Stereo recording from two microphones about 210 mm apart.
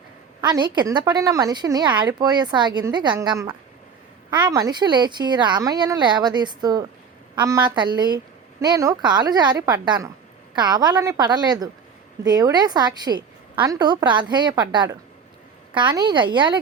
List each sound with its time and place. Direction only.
0.4 s a woman's voice: 20° right (ahead or behind)